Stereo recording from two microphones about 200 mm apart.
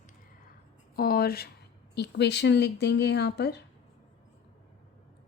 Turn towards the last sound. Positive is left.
turn(degrees=55)  # may be behind; listen again after turning